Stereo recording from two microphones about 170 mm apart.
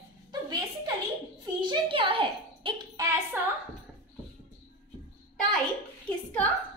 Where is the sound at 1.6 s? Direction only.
30° right (ahead or behind).